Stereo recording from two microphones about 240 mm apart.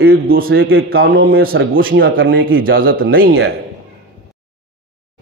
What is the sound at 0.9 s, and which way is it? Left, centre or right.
Speech, right.